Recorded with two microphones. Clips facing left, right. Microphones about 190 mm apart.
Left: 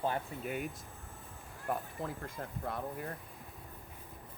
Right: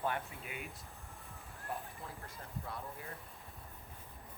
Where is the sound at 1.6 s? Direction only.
55° left (ahead or behind).